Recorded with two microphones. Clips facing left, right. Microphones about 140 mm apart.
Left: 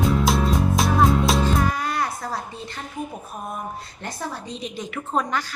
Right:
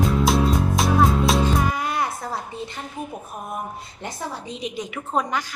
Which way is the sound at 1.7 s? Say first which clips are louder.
Even; 20° right (ahead or behind).